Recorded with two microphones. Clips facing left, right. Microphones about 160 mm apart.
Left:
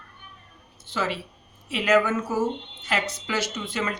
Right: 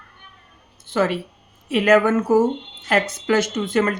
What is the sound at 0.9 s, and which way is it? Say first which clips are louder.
Speech: right 8 dB; 55° right (ahead or behind).